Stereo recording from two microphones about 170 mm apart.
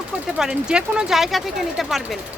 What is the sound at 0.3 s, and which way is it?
Speech, 5° right (ahead or behind).